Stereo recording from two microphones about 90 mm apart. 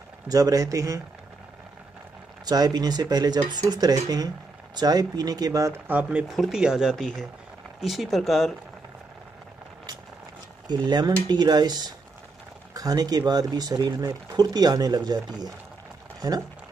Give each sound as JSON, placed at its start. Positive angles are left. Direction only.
{"t": 0.3, "sound": "speech", "side_deg": -40}
{"t": 2.4, "sound": "speech", "side_deg": -50}
{"t": 5.9, "sound": "speech", "side_deg": -15}
{"t": 6.2, "sound": "speech", "side_deg": -5}
{"t": 10.7, "sound": "speech", "side_deg": -55}